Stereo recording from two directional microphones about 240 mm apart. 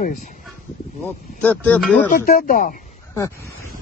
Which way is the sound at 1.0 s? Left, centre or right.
Centre.